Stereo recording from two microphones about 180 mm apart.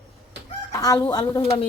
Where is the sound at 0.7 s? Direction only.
20° left (ahead or behind).